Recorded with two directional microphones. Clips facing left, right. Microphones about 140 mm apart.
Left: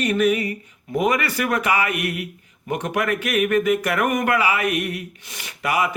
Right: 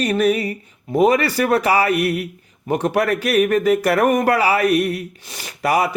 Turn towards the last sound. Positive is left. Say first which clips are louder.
# right 4 dB
turn(degrees=-40)  # may be behind; listen again after turning